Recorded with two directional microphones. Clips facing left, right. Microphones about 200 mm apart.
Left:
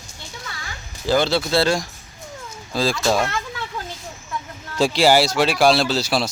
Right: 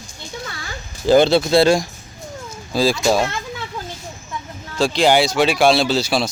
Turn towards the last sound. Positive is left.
turn(degrees=0)  # may be behind; listen again after turning